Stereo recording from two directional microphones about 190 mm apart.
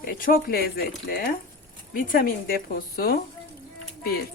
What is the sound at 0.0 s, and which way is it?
Speech, 50° left (ahead or behind).